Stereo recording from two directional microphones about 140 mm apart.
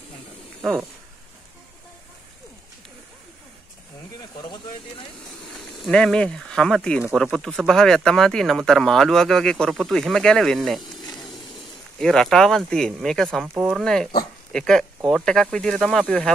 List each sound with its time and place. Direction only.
4.4 s snake: 35° left (ahead or behind)
5.5 s speech: centre (ahead or behind)
12.0 s speech: 5° left (ahead or behind)